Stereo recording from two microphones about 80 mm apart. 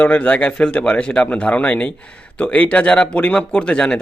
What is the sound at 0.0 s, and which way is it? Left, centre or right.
A man's voice, centre.